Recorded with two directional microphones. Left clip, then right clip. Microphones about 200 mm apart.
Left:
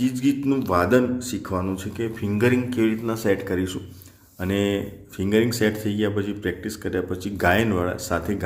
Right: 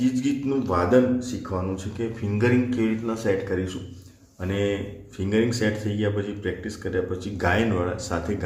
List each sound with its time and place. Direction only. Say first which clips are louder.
0.0 s a man's voice: left 2 dB; 40° left (ahead or behind)